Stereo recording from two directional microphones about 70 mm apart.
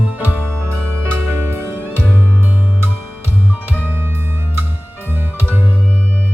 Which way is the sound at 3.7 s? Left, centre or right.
Right.